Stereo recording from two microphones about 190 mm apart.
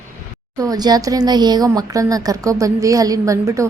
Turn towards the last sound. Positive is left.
turn(degrees=-15)  # may be behind; listen again after turning